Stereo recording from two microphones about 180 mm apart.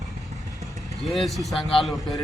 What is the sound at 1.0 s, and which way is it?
Speech, centre (ahead or behind).